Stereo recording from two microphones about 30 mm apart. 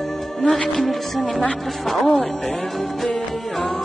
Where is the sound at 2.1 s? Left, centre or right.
Left.